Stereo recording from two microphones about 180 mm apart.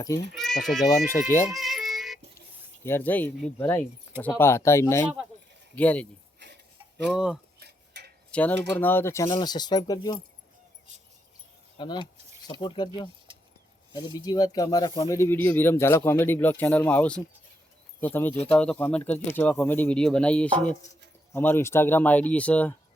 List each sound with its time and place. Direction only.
0.3 s speech: centre (ahead or behind)
1.5 s music: centre (ahead or behind)
2.8 s speech: 10° left (ahead or behind)
6.4 s a sound: 70° right (ahead or behind)
7.1 s speech: 5° right (ahead or behind)
7.6 s a sound: 65° right (ahead or behind)
8.3 s speech: 10° left (ahead or behind)
11.8 s speech: 25° left (ahead or behind); by 22.7 s 10° left (ahead or behind)